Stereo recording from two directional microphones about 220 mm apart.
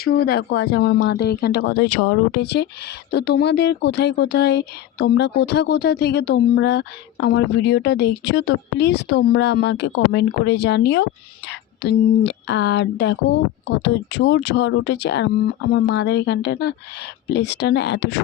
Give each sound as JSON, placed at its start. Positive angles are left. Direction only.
{"t": 0.0, "sound": "speech", "side_deg": 45}